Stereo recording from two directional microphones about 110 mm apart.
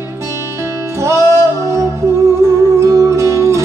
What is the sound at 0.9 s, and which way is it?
Music, 25° right (ahead or behind).